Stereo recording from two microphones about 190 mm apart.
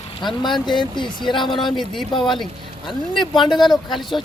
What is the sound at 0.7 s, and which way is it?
Speech, 25° left (ahead or behind).